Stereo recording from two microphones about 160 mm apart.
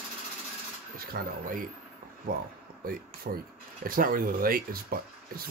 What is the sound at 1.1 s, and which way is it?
Speech, 60° right (ahead or behind).